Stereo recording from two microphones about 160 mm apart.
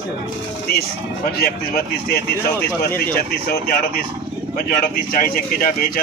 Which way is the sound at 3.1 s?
65° left (ahead or behind).